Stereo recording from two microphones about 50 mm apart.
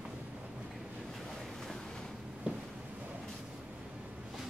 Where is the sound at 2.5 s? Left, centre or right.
Right.